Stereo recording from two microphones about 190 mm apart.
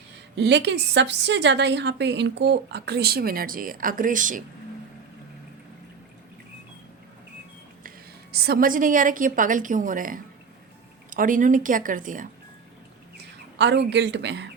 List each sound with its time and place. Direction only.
0.3 s a woman's voice: 65° right (ahead or behind); by 4.4 s 45° right (ahead or behind)
7.9 s a woman's voice: 55° right (ahead or behind)
13.6 s a woman's voice: 65° right (ahead or behind)